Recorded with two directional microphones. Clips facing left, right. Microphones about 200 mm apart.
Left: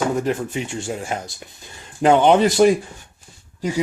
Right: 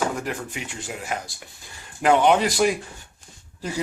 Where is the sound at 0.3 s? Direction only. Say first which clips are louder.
Left 8 dB; 25° left (ahead or behind).